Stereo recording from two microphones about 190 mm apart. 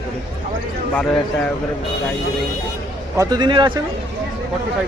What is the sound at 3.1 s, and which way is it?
Speech, 20° right (ahead or behind).